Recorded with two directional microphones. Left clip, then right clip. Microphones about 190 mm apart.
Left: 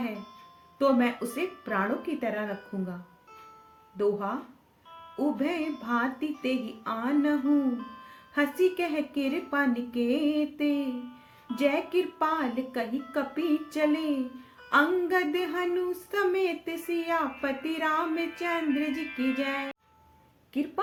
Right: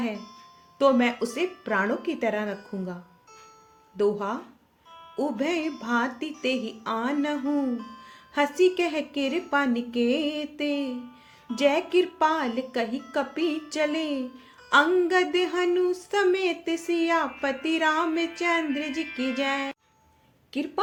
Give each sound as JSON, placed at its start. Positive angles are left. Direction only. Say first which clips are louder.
{"t": 0.8, "sound": "speech", "louder": "right 4 dB", "side_deg": -40}
{"t": 3.9, "sound": "speech", "louder": "right 3 dB", "side_deg": -45}
{"t": 4.9, "sound": "music", "louder": "right 5 dB", "side_deg": -10}
{"t": 5.4, "sound": "speech", "louder": "right 3 dB", "side_deg": -45}
{"t": 7.4, "sound": "speech", "louder": "left 1 dB", "side_deg": -5}
{"t": 8.4, "sound": "speech", "louder": "right 4 dB", "side_deg": -45}
{"t": 10.8, "sound": "music", "louder": "right 1 dB", "side_deg": -5}
{"t": 11.6, "sound": "speech", "louder": "right 4 dB", "side_deg": -45}
{"t": 18.9, "sound": "speech", "louder": "right 1 dB", "side_deg": -10}
{"t": 20.5, "sound": "speech", "louder": "right 3 dB", "side_deg": -45}